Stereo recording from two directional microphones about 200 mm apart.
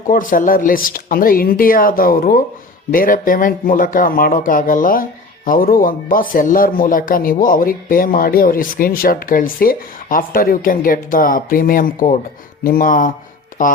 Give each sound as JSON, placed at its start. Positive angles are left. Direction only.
{"t": 0.1, "sound": "speech", "side_deg": 45}